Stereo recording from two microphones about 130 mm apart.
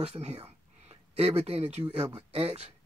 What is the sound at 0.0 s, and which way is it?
Speech, 55° right (ahead or behind).